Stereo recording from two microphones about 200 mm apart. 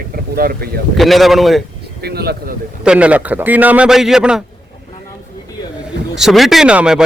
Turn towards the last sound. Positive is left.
turn(degrees=-5)  # may be behind; listen again after turning